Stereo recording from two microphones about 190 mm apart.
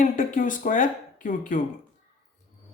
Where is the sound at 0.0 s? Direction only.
45° left (ahead or behind).